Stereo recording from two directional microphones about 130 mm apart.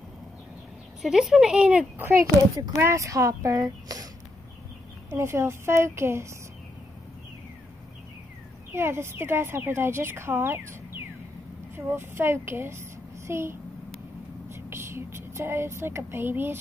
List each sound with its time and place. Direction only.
1.0 s speech: 5° right (ahead or behind); by 4.1 s 25° right (ahead or behind)
5.1 s speech: 20° right (ahead or behind)
8.7 s a woman's voice: 20° right (ahead or behind)